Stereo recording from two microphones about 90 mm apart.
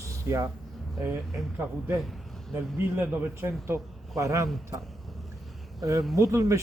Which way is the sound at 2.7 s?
25° right (ahead or behind).